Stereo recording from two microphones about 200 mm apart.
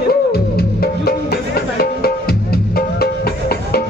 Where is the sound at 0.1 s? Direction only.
50° left (ahead or behind).